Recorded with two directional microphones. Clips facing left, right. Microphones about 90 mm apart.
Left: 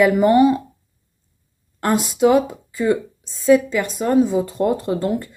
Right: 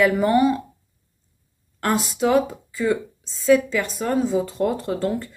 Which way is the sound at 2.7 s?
35° left (ahead or behind).